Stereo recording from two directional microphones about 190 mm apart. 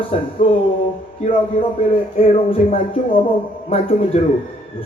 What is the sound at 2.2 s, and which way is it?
Speech, 30° left (ahead or behind).